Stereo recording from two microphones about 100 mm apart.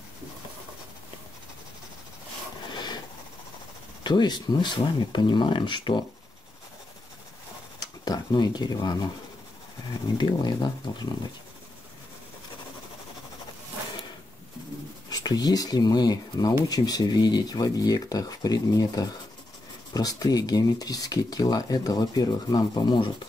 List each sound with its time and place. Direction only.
2.7 s a sound: 45° left (ahead or behind)
4.0 s speech: 50° left (ahead or behind)
7.8 s speech: 40° left (ahead or behind)
10.1 s speech: 50° left (ahead or behind)
15.0 s speech: 40° left (ahead or behind)